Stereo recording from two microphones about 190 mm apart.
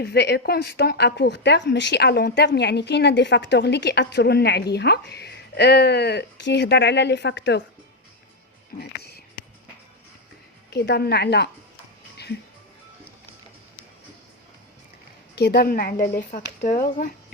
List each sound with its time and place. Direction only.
0.0 s a woman's voice: 60° left (ahead or behind)
8.8 s a sound: 60° left (ahead or behind)
10.8 s a woman's voice: 60° left (ahead or behind)
12.1 s music: 60° left (ahead or behind)
15.4 s a woman's voice: 60° left (ahead or behind)
16.6 s a woman's voice: 40° left (ahead or behind)